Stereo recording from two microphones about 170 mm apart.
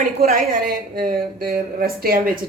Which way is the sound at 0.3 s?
60° right (ahead or behind).